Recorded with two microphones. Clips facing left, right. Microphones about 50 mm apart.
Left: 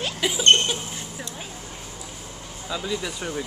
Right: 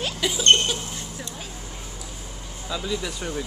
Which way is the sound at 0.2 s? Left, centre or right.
Centre.